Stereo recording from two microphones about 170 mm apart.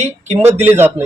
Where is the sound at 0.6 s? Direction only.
15° right (ahead or behind).